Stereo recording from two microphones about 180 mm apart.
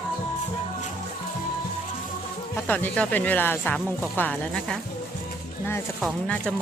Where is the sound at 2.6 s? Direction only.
10° left (ahead or behind).